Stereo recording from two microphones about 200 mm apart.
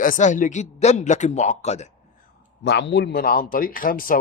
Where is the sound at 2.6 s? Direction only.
60° left (ahead or behind); by 4.2 s 45° left (ahead or behind).